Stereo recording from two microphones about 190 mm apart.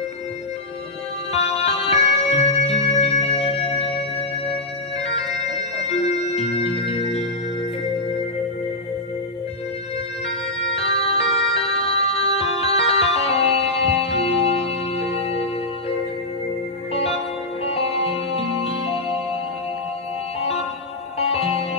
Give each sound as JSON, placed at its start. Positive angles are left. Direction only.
{"t": 1.3, "sound": "music", "side_deg": 35}
{"t": 6.0, "sound": "music", "side_deg": 35}
{"t": 10.6, "sound": "tick-tock", "side_deg": 30}
{"t": 12.0, "sound": "organ", "side_deg": 35}
{"t": 16.9, "sound": "music", "side_deg": 30}
{"t": 20.3, "sound": "music", "side_deg": 35}